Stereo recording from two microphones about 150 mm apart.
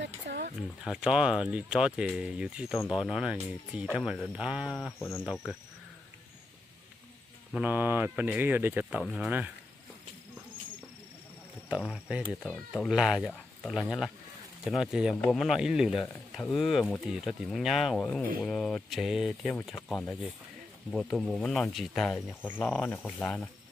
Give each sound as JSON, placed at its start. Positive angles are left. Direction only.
{"t": 0.3, "sound": "a sound", "side_deg": -90}
{"t": 0.8, "sound": "speech", "side_deg": -5}
{"t": 4.9, "sound": "speech", "side_deg": 15}
{"t": 7.5, "sound": "speech", "side_deg": -10}
{"t": 9.0, "sound": "speech", "side_deg": 0}
{"t": 11.9, "sound": "speech", "side_deg": -5}
{"t": 22.9, "sound": "speech", "side_deg": 0}